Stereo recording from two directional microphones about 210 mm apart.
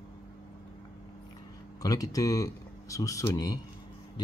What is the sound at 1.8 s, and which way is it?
Speech, 15° left (ahead or behind).